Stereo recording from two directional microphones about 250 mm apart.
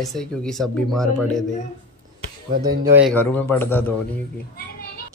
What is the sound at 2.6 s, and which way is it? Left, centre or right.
Speech, centre.